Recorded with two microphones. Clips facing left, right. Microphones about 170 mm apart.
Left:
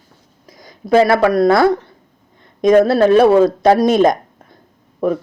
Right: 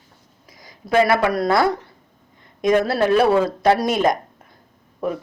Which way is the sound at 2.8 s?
25° left (ahead or behind).